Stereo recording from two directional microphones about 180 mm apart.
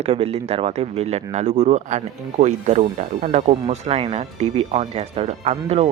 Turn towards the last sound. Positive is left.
turn(degrees=-35)  # may be behind; listen again after turning